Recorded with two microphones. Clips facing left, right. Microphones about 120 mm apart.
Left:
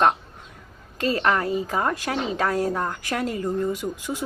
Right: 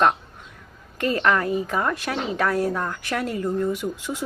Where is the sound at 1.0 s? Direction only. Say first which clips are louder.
Right 1 dB; 25° left (ahead or behind).